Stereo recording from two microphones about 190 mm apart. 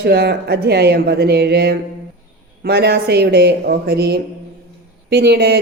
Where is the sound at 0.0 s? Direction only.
55° right (ahead or behind).